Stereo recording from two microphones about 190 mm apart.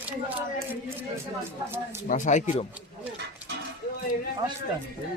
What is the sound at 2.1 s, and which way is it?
Speech, 40° left (ahead or behind).